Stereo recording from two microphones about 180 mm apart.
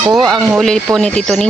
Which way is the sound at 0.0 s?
25° right (ahead or behind).